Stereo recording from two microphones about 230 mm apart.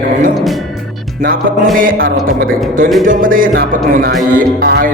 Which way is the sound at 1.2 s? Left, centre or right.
Right.